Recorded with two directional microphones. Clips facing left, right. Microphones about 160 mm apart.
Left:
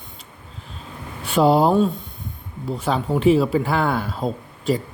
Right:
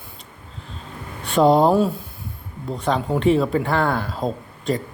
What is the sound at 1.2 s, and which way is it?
Speech, 5° left (ahead or behind).